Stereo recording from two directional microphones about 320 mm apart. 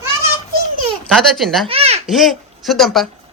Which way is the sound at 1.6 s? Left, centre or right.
Centre.